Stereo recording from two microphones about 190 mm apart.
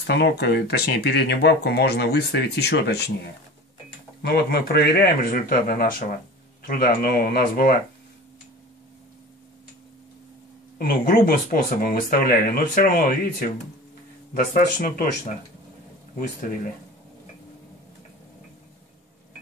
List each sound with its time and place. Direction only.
0.0 s speech: 60° left (ahead or behind)
10.8 s speech: 50° left (ahead or behind)